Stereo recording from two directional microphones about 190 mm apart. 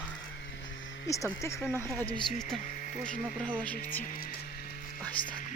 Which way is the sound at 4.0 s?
45° left (ahead or behind).